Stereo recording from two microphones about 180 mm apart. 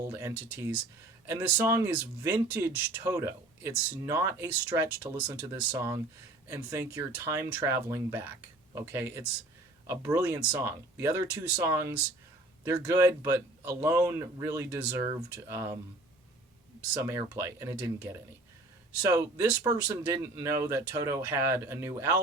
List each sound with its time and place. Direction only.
0.0 s speech: 15° right (ahead or behind)
17.0 s speech: 15° right (ahead or behind)